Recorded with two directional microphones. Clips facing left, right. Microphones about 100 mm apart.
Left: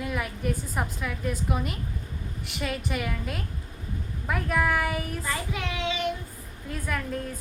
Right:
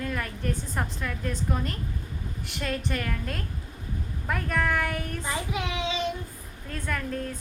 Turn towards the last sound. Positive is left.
turn(degrees=5)  # may be behind; listen again after turning